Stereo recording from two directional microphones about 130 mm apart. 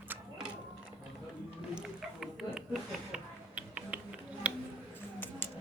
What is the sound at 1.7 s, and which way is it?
Music, 5° right (ahead or behind).